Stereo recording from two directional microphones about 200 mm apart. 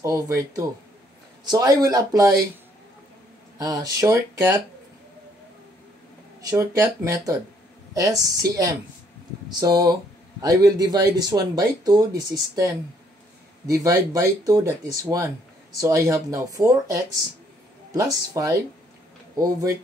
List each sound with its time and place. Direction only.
0.0 s speech: 15° right (ahead or behind)
3.5 s speech: 20° right (ahead or behind)
6.4 s speech: 15° right (ahead or behind)
13.7 s speech: 15° right (ahead or behind)